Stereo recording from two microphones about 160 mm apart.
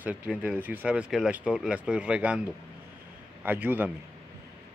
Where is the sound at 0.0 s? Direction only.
10° right (ahead or behind).